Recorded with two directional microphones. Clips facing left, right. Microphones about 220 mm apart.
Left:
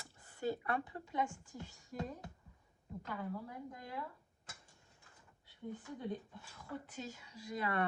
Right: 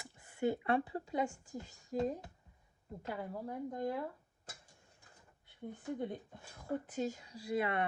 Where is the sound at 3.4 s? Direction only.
50° right (ahead or behind).